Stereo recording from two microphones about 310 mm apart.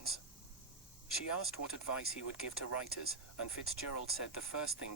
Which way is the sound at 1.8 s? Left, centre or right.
Left.